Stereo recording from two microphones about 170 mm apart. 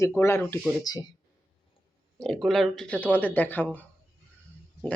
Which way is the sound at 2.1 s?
5° left (ahead or behind).